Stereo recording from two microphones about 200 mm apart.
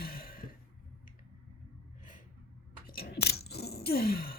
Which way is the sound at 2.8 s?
50° left (ahead or behind).